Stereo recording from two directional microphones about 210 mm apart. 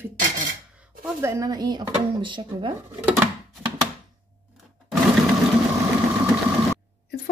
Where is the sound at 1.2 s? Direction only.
15° right (ahead or behind).